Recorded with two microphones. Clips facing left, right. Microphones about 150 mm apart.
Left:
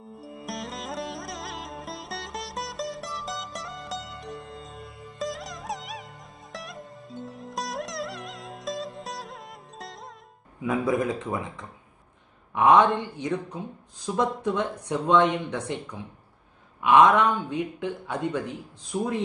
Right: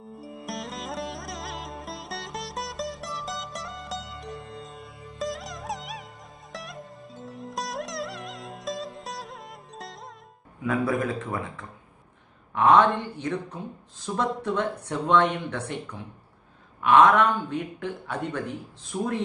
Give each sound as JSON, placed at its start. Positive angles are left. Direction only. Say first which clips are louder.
{"t": 0.2, "sound": "sitar", "louder": "even", "side_deg": 0}
{"t": 6.5, "sound": "music", "louder": "even", "side_deg": 0}
{"t": 10.6, "sound": "a man's voice", "louder": "left 1 dB", "side_deg": 20}
{"t": 16.8, "sound": "speech", "louder": "even", "side_deg": 15}